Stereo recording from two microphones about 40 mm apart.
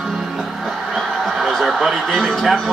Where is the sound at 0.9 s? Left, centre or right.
Centre.